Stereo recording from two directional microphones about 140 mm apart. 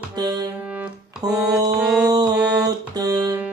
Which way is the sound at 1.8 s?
5° right (ahead or behind).